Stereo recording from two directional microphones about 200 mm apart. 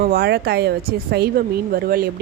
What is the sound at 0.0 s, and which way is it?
A woman's voice, 50° right (ahead or behind).